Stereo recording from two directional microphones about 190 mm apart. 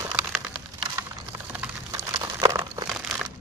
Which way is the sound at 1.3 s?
10° right (ahead or behind).